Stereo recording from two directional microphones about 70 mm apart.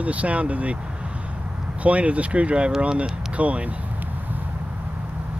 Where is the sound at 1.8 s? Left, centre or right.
Centre.